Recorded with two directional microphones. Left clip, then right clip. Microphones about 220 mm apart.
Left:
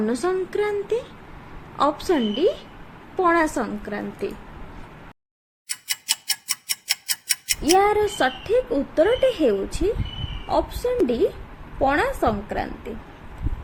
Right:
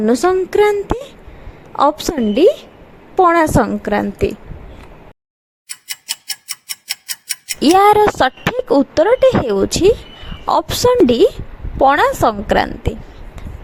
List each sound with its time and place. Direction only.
0.0 s speech: 35° right (ahead or behind)
5.6 s tick-tock: centre (ahead or behind)
7.8 s a woman's voice: 45° right (ahead or behind)